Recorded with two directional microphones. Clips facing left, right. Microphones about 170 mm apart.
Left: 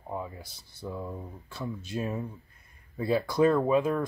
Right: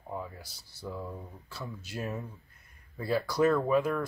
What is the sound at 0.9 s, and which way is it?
Speech, 20° left (ahead or behind).